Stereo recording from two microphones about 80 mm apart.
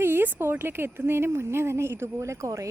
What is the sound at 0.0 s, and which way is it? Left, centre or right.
Speech, right.